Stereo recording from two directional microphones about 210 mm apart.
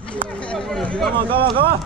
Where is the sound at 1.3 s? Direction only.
25° right (ahead or behind).